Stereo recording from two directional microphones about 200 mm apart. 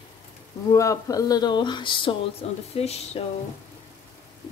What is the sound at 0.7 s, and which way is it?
Speech, 15° left (ahead or behind).